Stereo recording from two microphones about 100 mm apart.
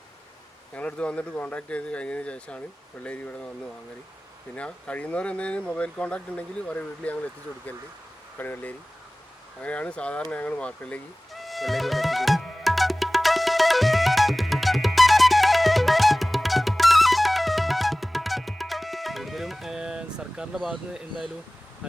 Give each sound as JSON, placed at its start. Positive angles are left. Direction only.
{"t": 0.7, "sound": "speech", "side_deg": 10}
{"t": 4.5, "sound": "speech", "side_deg": 15}
{"t": 8.4, "sound": "speech", "side_deg": 20}
{"t": 11.3, "sound": "music", "side_deg": 0}